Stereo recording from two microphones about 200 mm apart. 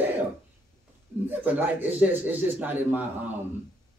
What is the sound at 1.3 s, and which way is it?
Speech, 10° right (ahead or behind).